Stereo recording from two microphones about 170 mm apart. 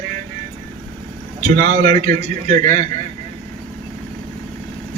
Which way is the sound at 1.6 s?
55° right (ahead or behind).